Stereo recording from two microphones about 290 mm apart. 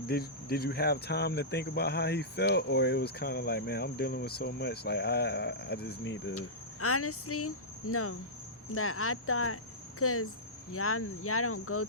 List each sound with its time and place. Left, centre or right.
0.1 s speech: left
8.7 s cricket: left